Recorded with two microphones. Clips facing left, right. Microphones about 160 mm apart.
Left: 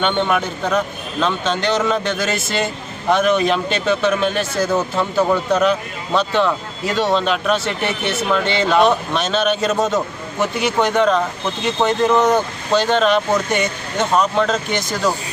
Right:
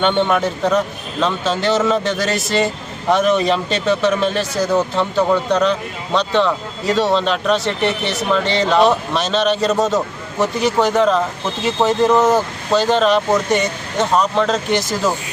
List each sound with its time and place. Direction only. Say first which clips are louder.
0.0 s speech: right 2 dB; centre (ahead or behind)